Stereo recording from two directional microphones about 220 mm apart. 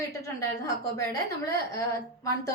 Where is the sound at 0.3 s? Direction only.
15° left (ahead or behind).